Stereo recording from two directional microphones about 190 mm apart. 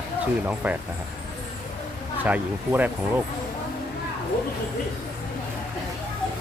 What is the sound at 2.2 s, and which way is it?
Speech, 10° right (ahead or behind).